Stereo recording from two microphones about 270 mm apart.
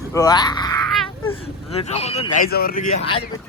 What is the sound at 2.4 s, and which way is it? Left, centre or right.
Speech, left.